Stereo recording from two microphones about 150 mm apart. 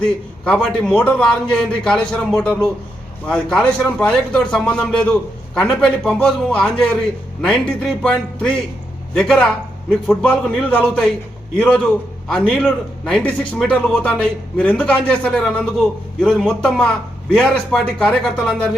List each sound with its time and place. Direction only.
0.0 s a man's voice: 5° left (ahead or behind)